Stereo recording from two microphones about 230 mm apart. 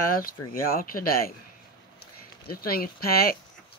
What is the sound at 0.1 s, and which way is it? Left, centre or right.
Speech, left.